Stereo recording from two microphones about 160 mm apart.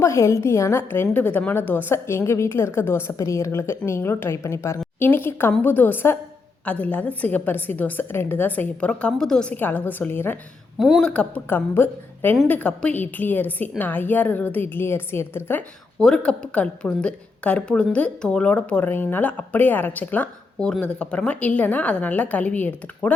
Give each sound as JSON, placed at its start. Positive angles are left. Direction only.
{"t": 0.0, "sound": "a woman's voice", "side_deg": 15}
{"t": 10.8, "sound": "a woman's voice", "side_deg": 0}
{"t": 16.0, "sound": "a woman's voice", "side_deg": 5}